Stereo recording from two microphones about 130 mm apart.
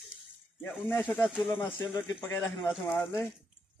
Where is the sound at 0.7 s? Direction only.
15° left (ahead or behind).